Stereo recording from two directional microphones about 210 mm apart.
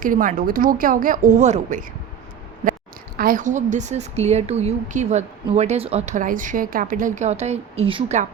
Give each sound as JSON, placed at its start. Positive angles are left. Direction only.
{"t": 0.0, "sound": "speech", "side_deg": -40}
{"t": 2.6, "sound": "a sound", "side_deg": -40}
{"t": 3.2, "sound": "speech", "side_deg": -40}